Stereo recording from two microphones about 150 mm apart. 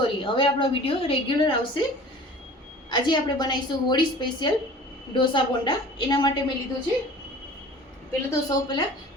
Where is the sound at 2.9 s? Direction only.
30° left (ahead or behind).